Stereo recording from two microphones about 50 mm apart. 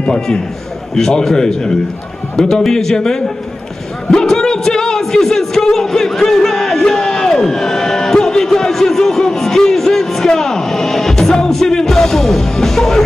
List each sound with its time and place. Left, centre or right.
0.0 s a man's voice: centre
4.1 s music: centre